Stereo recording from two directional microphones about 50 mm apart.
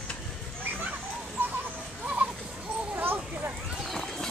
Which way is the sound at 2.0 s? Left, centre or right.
Right.